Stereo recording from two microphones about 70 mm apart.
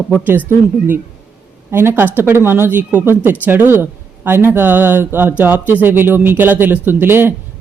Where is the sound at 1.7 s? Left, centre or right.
Right.